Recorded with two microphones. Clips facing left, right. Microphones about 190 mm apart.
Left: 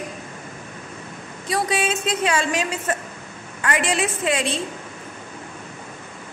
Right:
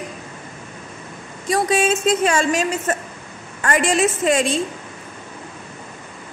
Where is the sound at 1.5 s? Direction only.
45° right (ahead or behind).